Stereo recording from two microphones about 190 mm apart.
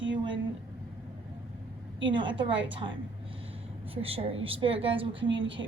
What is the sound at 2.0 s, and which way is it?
A woman's voice, 25° right (ahead or behind).